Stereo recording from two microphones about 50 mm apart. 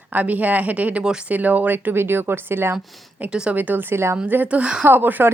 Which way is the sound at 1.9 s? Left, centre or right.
Right.